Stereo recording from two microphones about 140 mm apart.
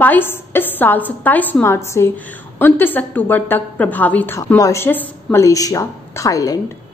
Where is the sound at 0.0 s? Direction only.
15° left (ahead or behind).